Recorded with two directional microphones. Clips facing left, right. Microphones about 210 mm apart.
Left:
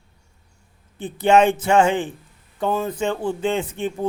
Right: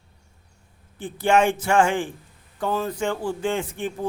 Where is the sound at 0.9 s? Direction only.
20° left (ahead or behind).